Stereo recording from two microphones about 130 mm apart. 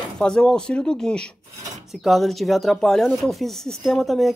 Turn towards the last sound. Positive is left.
turn(degrees=0)  # may be behind; listen again after turning